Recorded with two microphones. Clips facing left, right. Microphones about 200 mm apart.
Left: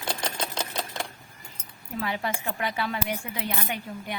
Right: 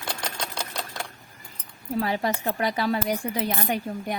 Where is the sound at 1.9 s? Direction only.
40° right (ahead or behind).